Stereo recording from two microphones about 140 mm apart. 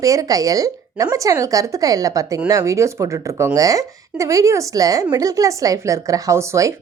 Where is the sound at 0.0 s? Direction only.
25° right (ahead or behind).